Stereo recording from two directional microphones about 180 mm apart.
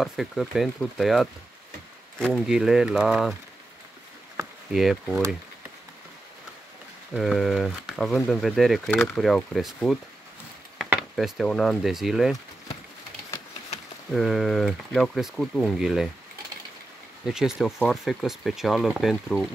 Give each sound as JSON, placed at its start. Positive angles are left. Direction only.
{"t": 0.0, "sound": "speech", "side_deg": 0}
{"t": 4.7, "sound": "speech", "side_deg": 0}
{"t": 7.2, "sound": "speech", "side_deg": 0}
{"t": 14.1, "sound": "speech", "side_deg": 0}
{"t": 17.3, "sound": "speech", "side_deg": -5}